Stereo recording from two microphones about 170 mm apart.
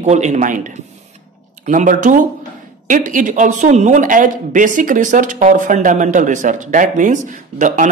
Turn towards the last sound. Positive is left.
turn(degrees=-50)  # may be behind; listen again after turning